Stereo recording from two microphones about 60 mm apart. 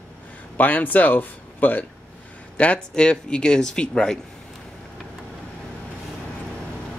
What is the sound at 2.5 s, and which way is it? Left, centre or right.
Speech, centre.